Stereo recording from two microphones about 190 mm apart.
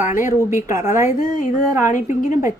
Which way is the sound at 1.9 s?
40° left (ahead or behind).